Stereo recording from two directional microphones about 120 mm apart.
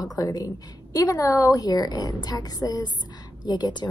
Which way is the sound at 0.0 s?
35° left (ahead or behind).